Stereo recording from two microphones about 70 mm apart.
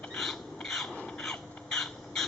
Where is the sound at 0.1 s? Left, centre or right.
Centre.